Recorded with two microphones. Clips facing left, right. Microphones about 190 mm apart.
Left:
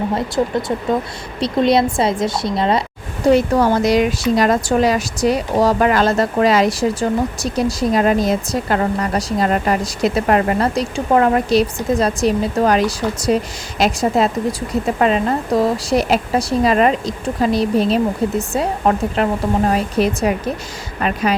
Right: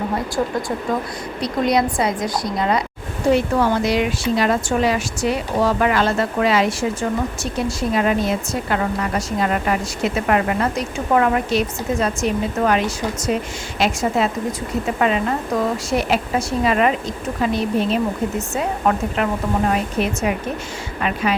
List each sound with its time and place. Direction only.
1.4 s a woman's voice: 25° left (ahead or behind)
3.3 s speech: 40° left (ahead or behind)